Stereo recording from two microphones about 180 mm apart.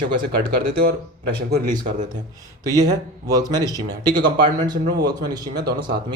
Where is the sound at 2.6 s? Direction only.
20° right (ahead or behind).